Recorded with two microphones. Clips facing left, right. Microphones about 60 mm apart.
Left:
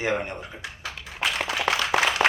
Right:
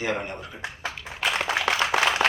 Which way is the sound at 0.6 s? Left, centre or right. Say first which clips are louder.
Right 3 dB; right.